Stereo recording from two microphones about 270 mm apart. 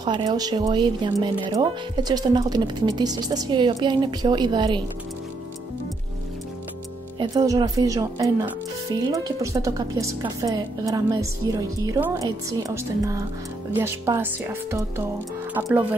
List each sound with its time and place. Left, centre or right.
0.0 s speech: centre
7.2 s speech: centre